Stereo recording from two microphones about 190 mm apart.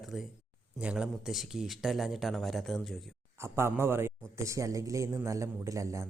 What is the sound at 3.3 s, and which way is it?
A man's voice, 15° right (ahead or behind).